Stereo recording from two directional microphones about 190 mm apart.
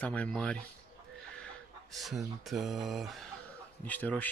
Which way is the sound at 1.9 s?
Centre (ahead or behind).